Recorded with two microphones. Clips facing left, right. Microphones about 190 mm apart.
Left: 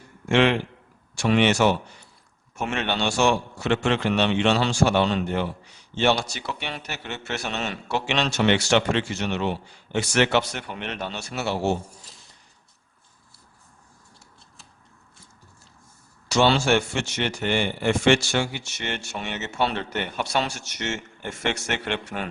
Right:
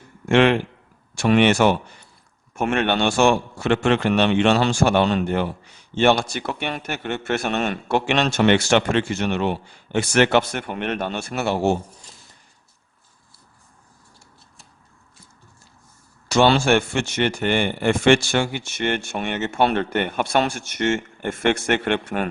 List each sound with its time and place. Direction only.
0.3 s a man's voice: 55° right (ahead or behind)
16.3 s a man's voice: 55° right (ahead or behind)